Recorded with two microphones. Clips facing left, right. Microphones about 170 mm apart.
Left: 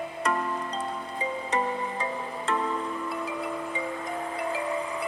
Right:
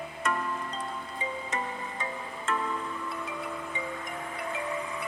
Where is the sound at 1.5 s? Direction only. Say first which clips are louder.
Left 7 dB; 35° left (ahead or behind).